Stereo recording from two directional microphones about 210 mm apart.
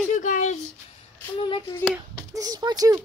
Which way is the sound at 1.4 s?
20° left (ahead or behind).